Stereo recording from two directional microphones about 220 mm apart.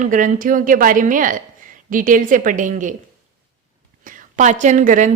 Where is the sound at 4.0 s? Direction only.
40° right (ahead or behind).